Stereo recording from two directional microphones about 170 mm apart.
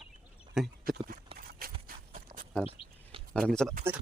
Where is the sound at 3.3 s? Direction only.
5° left (ahead or behind).